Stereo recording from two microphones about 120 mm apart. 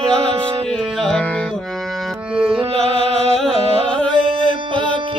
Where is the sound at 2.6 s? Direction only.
55° right (ahead or behind).